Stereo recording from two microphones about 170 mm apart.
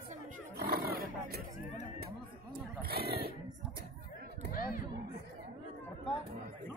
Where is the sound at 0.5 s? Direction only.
65° right (ahead or behind).